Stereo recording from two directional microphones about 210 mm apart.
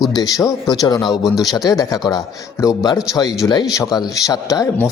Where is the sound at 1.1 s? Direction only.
Centre (ahead or behind).